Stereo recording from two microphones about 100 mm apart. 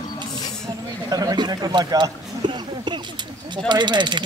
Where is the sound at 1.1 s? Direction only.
40° right (ahead or behind).